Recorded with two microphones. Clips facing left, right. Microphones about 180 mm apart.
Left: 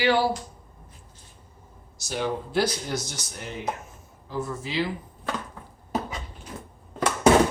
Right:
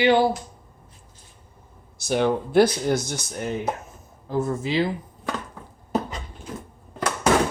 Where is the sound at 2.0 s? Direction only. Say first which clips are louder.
Right 7 dB; 60° right (ahead or behind).